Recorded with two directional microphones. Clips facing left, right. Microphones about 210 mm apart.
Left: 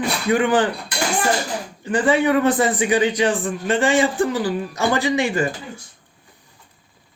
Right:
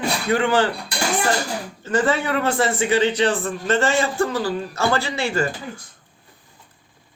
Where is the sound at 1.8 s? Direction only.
15° left (ahead or behind).